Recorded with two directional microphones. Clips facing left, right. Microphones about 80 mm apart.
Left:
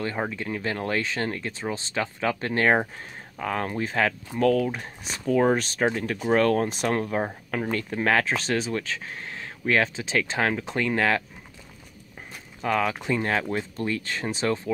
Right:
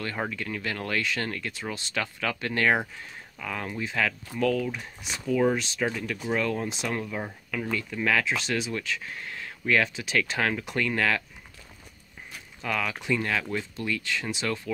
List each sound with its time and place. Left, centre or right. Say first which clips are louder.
0.3 s speech: left 3 dB; left
3.3 s speech: left 6 dB; left
6.3 s speech: left 8 dB; left
12.6 s speech: left 4 dB; left